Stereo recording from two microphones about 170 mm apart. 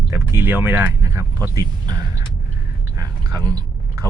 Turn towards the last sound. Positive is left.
turn(degrees=-20)  # may be behind; listen again after turning